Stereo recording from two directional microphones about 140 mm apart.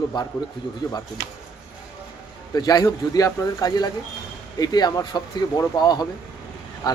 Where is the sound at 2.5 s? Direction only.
30° left (ahead or behind).